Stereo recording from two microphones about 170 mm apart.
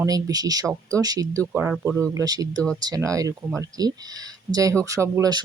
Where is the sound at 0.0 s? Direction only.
20° right (ahead or behind).